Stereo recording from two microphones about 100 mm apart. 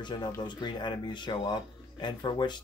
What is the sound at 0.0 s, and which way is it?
Speech, 45° left (ahead or behind).